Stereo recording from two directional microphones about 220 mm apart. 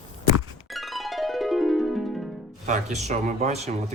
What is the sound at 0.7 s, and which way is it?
Music, centre (ahead or behind).